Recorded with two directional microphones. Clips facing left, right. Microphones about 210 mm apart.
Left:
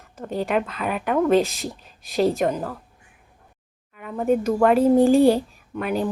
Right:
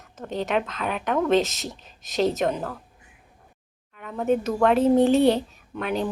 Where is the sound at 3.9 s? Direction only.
5° left (ahead or behind).